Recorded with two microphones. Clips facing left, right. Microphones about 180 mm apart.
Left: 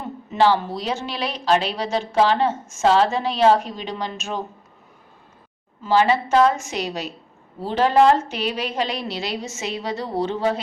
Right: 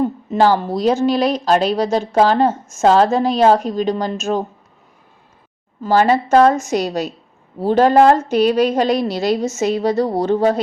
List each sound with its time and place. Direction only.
0.0 s speech: 40° right (ahead or behind)
5.8 s speech: 45° right (ahead or behind)